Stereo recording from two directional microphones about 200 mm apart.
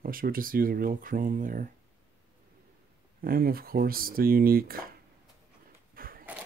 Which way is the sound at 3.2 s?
50° right (ahead or behind).